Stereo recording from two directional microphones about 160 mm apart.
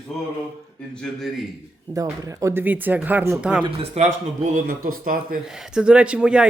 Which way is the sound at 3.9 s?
50° right (ahead or behind).